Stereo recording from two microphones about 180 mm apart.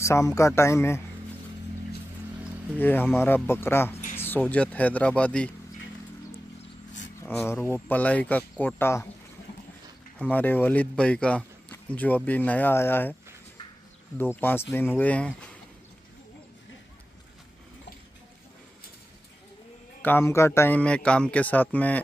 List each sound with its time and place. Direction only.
0.0 s a man's voice: 15° left (ahead or behind)
2.8 s a man's voice: 10° left (ahead or behind)
7.2 s a man's voice: 10° left (ahead or behind)
10.1 s a man's voice: 10° left (ahead or behind)
14.1 s a man's voice: 10° left (ahead or behind)
20.0 s a man's voice: 10° left (ahead or behind)